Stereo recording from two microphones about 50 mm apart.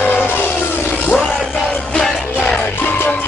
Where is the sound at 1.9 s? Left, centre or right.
Left.